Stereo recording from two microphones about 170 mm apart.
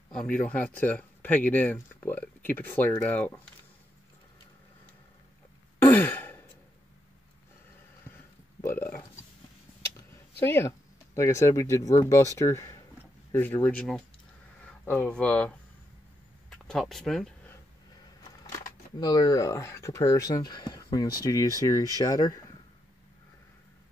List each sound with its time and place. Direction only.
0.1 s speech: 5° left (ahead or behind)
5.8 s sigh: 10° left (ahead or behind)
8.5 s burping: 15° left (ahead or behind)
10.4 s speech: 15° left (ahead or behind)
18.9 s speech: 20° left (ahead or behind)